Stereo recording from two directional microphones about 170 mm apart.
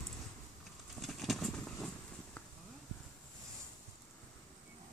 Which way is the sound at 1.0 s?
Centre (ahead or behind).